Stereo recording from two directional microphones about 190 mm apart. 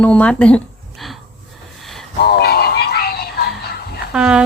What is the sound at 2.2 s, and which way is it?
Music, 55° left (ahead or behind).